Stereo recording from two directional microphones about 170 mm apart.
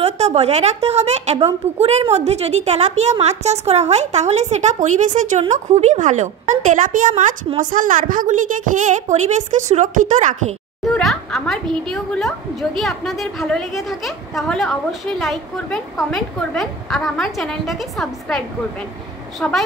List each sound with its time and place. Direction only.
0.0 s a woman's voice: 35° right (ahead or behind)
11.0 s a woman's voice: centre (ahead or behind)
19.4 s a woman's voice: 10° left (ahead or behind)